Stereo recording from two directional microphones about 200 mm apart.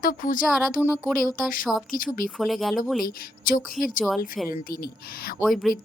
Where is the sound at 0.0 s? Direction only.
40° left (ahead or behind).